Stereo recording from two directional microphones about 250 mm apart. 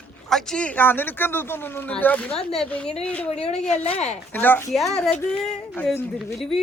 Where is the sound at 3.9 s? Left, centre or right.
Left.